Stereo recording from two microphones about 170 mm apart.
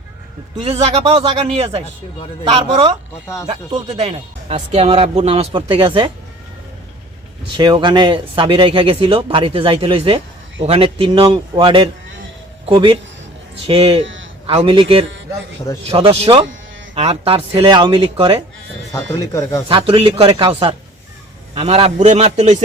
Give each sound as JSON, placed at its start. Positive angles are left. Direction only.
{"t": 0.5, "sound": "speech", "side_deg": -35}
{"t": 7.5, "sound": "speech", "side_deg": -25}
{"t": 14.0, "sound": "a sound", "side_deg": -90}
{"t": 14.4, "sound": "speech", "side_deg": -30}
{"t": 18.9, "sound": "speech", "side_deg": 20}
{"t": 19.6, "sound": "speech", "side_deg": -30}